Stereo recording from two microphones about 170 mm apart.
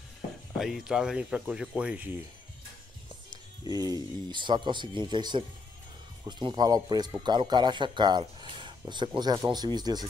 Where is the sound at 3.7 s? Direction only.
20° right (ahead or behind).